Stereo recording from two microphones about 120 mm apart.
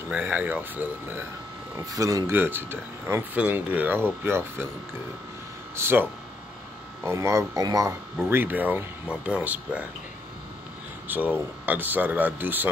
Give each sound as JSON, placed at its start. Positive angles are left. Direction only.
{"t": 0.1, "sound": "speech", "side_deg": -15}
{"t": 1.9, "sound": "speech", "side_deg": -30}
{"t": 5.8, "sound": "speech", "side_deg": -20}
{"t": 7.1, "sound": "speech", "side_deg": -25}
{"t": 11.1, "sound": "speech", "side_deg": -15}